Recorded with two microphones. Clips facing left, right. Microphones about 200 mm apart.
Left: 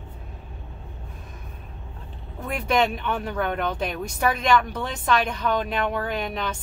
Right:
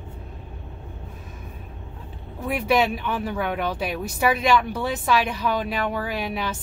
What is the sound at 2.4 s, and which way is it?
Speech, 5° right (ahead or behind).